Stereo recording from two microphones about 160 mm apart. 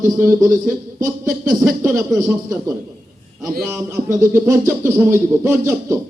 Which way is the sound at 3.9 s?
20° right (ahead or behind).